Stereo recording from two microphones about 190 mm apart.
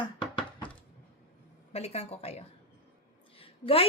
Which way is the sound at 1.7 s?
35° left (ahead or behind).